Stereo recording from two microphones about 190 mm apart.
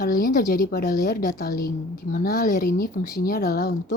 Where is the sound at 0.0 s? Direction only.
50° left (ahead or behind).